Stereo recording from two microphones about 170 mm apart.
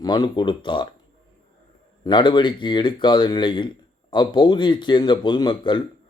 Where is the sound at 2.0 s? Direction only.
30° left (ahead or behind).